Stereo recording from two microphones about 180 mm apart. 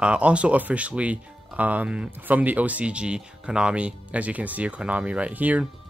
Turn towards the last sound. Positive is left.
turn(degrees=-10)  # may be behind; listen again after turning